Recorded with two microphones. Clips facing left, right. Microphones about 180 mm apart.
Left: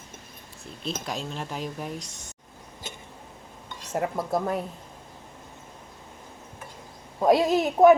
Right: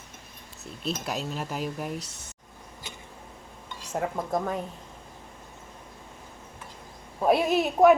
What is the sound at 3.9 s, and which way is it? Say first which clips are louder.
Speech: left 2 dB; 10° left (ahead or behind).